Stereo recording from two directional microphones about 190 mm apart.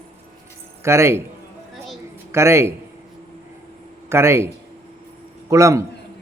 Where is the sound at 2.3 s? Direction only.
15° right (ahead or behind).